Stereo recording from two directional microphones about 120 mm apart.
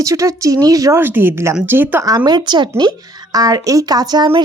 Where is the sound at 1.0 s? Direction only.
15° right (ahead or behind).